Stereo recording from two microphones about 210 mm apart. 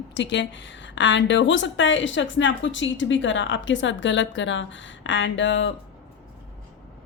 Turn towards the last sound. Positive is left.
turn(degrees=60)  # may be behind; listen again after turning